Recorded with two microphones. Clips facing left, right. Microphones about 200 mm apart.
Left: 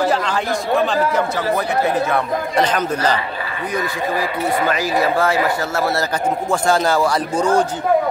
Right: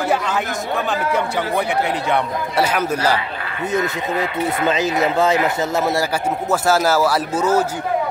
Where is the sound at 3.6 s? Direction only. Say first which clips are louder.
Right 2 dB; 25° right (ahead or behind); by 7.6 s 5° right (ahead or behind).